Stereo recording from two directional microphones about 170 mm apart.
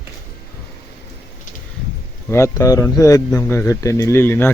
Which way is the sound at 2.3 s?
20° left (ahead or behind).